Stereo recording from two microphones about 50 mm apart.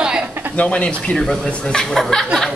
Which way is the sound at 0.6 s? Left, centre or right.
Left.